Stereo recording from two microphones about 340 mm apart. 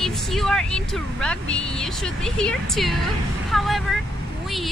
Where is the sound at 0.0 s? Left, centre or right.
Centre.